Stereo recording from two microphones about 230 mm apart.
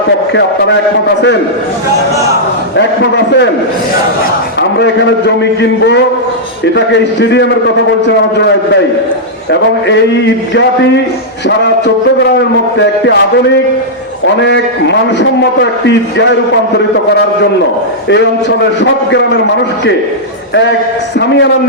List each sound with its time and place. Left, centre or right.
2.7 s a man's voice: left
4.8 s a man's voice: left
10.5 s a man's voice: left
14.4 s a man's voice: left
16.7 s a man's voice: left
20.5 s a man's voice: left